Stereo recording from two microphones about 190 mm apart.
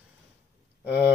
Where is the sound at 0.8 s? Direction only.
10° right (ahead or behind).